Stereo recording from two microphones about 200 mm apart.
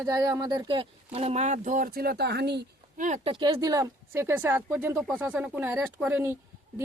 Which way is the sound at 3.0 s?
35° right (ahead or behind).